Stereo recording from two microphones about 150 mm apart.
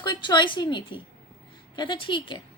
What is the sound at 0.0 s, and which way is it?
A woman's voice, 30° left (ahead or behind).